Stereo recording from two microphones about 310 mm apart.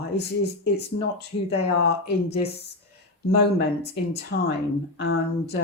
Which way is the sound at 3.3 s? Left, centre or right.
Left.